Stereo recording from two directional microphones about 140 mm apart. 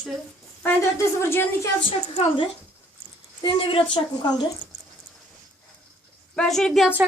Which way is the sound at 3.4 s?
35° left (ahead or behind).